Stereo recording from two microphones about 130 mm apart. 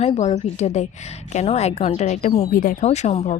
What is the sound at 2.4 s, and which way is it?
A woman's voice, 90° left.